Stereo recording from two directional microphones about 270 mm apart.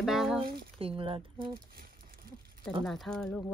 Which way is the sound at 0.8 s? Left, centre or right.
Centre.